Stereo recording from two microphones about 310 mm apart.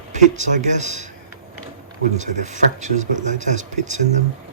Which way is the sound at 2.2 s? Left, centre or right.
Right.